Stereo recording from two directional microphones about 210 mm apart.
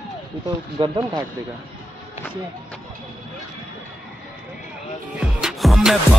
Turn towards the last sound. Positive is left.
turn(degrees=0)  # may be behind; listen again after turning